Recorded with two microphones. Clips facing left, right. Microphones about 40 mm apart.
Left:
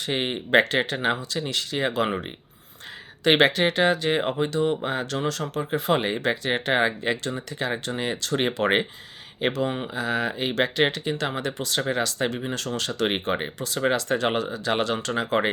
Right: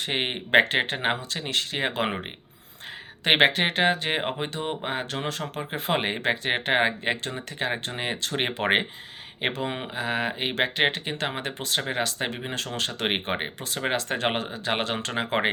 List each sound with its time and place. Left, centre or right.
0.0 s speech: right
3.2 s speech: right